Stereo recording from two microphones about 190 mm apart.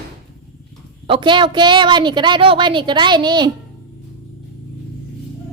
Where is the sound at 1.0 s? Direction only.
25° right (ahead or behind).